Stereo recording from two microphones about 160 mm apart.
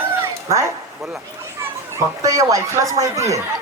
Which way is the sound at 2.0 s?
20° right (ahead or behind).